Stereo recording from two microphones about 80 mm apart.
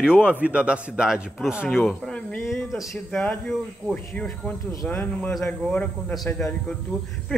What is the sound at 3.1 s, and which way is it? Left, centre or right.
Speech, centre.